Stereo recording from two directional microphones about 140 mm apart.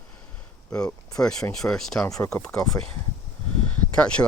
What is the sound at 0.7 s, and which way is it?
Speech, 10° left (ahead or behind).